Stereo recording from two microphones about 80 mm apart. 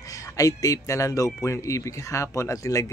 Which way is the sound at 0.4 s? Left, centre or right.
Left.